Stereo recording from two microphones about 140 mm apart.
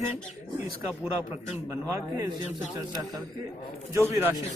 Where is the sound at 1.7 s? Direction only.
20° right (ahead or behind).